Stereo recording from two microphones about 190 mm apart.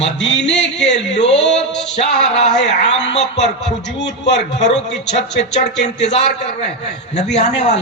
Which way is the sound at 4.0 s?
65° left (ahead or behind).